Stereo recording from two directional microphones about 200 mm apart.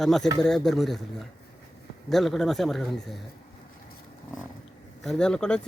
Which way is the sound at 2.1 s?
Centre (ahead or behind).